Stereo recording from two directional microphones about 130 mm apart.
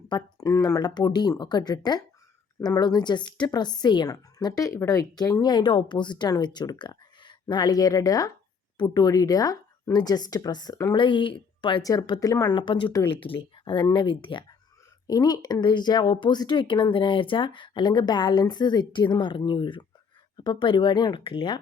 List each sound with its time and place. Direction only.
0.1 s speech: 30° left (ahead or behind)
11.8 s speech: 30° left (ahead or behind)
15.0 s speech: 30° left (ahead or behind)